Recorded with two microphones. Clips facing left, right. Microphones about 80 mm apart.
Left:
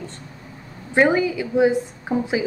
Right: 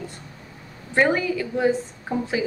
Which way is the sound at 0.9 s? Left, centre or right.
Centre.